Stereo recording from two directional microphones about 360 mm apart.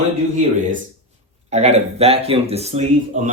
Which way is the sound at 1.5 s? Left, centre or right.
Centre.